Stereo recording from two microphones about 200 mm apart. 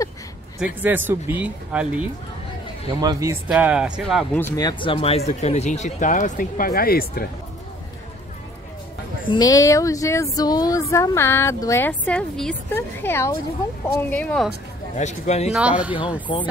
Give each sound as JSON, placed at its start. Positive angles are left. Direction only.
{"t": 0.8, "sound": "speech", "side_deg": -10}
{"t": 3.0, "sound": "speech", "side_deg": -15}
{"t": 3.4, "sound": "speech", "side_deg": -5}
{"t": 4.4, "sound": "speech", "side_deg": 15}
{"t": 9.3, "sound": "speech", "side_deg": 20}
{"t": 15.0, "sound": "speech", "side_deg": 35}
{"t": 15.5, "sound": "speech", "side_deg": -5}